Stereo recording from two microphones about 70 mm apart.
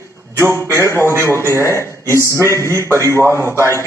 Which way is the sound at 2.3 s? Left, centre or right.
Left.